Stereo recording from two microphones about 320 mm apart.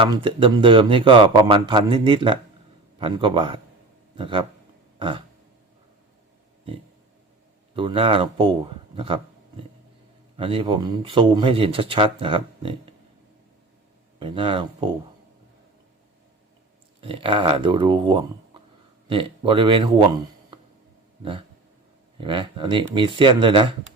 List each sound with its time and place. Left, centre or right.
0.0 s speech: centre
4.9 s throat clearing: centre
7.8 s speech: centre
10.3 s speech: centre
14.2 s speech: centre
17.0 s speech: centre
21.2 s a sound: centre
22.2 s speech: centre